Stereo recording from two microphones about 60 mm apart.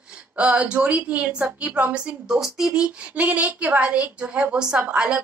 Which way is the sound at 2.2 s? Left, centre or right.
Centre.